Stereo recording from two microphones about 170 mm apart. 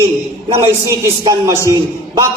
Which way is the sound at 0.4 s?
30° right (ahead or behind).